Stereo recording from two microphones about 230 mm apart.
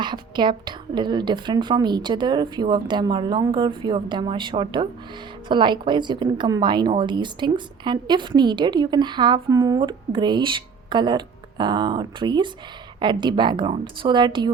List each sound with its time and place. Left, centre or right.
0.0 s a woman's voice: centre